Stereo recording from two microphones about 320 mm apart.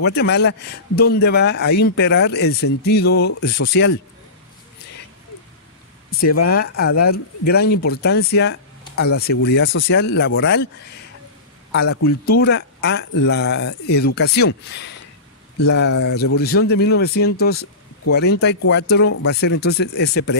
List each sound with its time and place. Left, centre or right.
0.0 s speech: left
6.5 s speech: left
11.7 s speech: left
15.9 s speech: left
16.2 s speech: left